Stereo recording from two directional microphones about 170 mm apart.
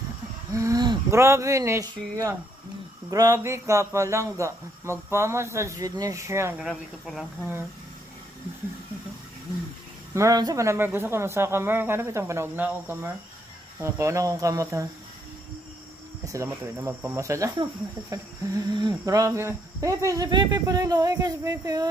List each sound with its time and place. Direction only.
0.5 s speech: 20° right (ahead or behind)
6.6 s speech: centre (ahead or behind)
10.1 s speech: 20° right (ahead or behind)
16.3 s speech: 15° right (ahead or behind)